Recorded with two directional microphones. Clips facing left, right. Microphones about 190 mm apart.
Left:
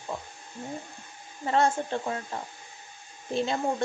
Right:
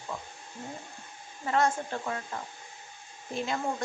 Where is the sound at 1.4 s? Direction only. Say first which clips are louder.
Left 2 dB; 30° left (ahead or behind).